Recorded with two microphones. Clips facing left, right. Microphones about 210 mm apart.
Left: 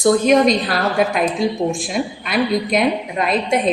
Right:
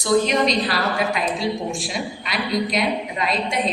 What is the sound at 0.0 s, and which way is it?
A woman's voice, 50° left (ahead or behind).